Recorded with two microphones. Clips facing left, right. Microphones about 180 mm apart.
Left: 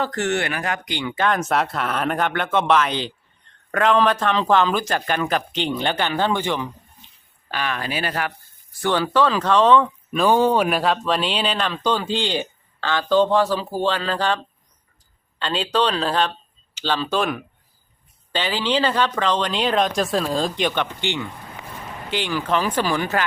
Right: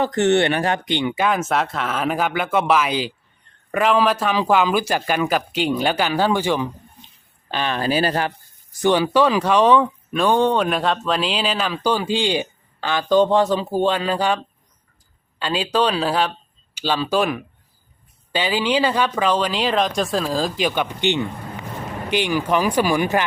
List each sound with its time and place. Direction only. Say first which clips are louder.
0.0 s speech: right 6 dB; 20° right (ahead or behind)
1.1 s speech: left 3 dB; 10° right (ahead or behind)
7.5 s speech: right 5 dB; 30° right (ahead or behind)
8.8 s speech: right 3 dB; 15° right (ahead or behind)
10.1 s speech: left 1 dB; centre (ahead or behind); by 23.2 s 15° right (ahead or behind)